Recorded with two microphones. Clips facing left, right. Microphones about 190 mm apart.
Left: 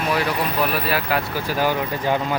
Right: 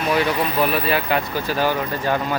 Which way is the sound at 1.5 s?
10° left (ahead or behind).